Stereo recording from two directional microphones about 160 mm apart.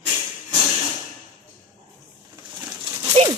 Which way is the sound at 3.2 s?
35° right (ahead or behind).